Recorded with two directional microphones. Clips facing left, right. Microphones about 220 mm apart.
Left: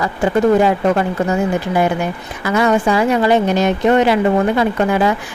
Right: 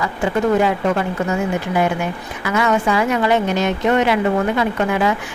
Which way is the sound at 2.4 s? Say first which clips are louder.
Left 3 dB; 35° left (ahead or behind).